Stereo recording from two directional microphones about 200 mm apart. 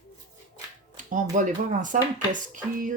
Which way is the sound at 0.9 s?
40° right (ahead or behind).